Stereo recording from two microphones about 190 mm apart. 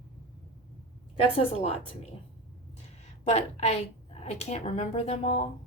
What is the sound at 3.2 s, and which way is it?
A woman's voice, 35° left (ahead or behind).